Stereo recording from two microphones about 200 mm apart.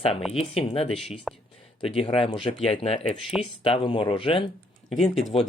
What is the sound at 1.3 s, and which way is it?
Speech, centre (ahead or behind).